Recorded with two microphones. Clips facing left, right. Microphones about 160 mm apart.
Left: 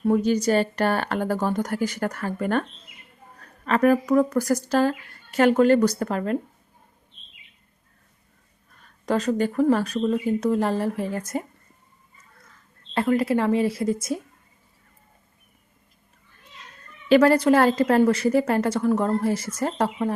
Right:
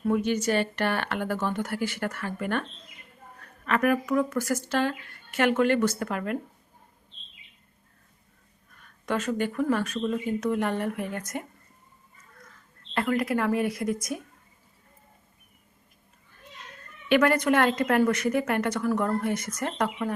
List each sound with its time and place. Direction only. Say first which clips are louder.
0.0 s speech: left 4 dB; 35° left (ahead or behind)
8.7 s speech: left 5 dB; 35° left (ahead or behind)
12.9 s speech: left 5 dB; 30° left (ahead or behind)
17.1 s speech: left 5 dB; 30° left (ahead or behind)